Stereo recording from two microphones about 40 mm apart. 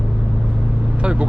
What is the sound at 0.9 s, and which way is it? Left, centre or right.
Speech, right.